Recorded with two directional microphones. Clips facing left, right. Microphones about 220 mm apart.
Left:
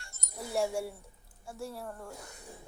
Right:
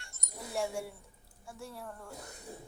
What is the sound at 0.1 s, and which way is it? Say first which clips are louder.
Music: left 4 dB; 40° left (ahead or behind).